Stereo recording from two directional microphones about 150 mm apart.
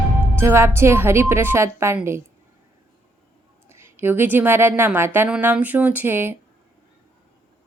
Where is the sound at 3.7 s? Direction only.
15° right (ahead or behind).